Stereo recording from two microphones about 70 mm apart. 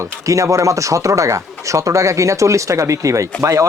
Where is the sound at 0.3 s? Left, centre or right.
Right.